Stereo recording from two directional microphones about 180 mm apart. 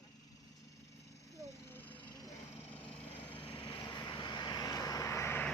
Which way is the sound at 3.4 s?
25° left (ahead or behind).